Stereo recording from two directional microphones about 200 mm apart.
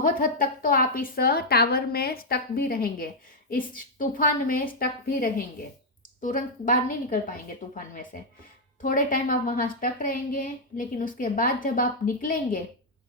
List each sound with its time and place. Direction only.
0.0 s a woman's voice: 45° left (ahead or behind)